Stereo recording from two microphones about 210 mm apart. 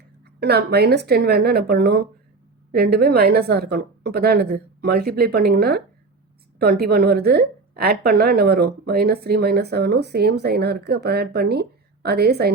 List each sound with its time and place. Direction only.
0.3 s a woman's voice: 50° right (ahead or behind)